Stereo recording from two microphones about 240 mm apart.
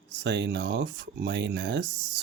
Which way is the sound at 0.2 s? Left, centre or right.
Right.